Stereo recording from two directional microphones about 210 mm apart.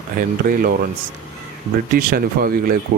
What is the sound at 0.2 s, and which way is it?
Speech, 45° right (ahead or behind).